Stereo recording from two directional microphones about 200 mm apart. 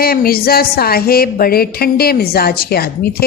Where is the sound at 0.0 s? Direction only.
50° left (ahead or behind).